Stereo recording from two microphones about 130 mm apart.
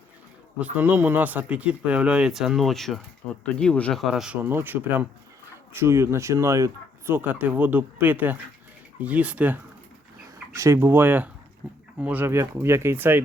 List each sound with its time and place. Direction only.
0.6 s speech: 10° right (ahead or behind); by 4.0 s 5° left (ahead or behind)
4.0 s speech: 5° right (ahead or behind)
4.4 s speech: 15° right (ahead or behind)
10.5 s speech: 25° right (ahead or behind)